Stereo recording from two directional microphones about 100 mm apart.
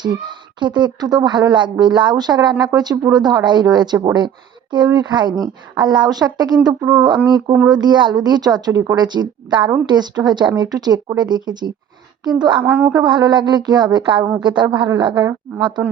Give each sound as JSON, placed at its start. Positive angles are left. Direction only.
{"t": 0.0, "sound": "speech", "side_deg": -50}
{"t": 12.6, "sound": "speech", "side_deg": -20}
{"t": 13.1, "sound": "speech", "side_deg": -45}